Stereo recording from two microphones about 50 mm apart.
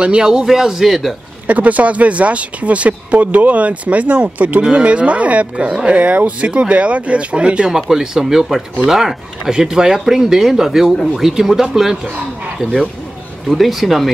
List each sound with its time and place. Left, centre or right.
0.0 s speech: centre
1.5 s speech: right
7.7 s speech: centre
13.5 s speech: centre